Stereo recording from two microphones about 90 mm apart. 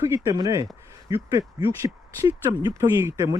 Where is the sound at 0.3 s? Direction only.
40° right (ahead or behind).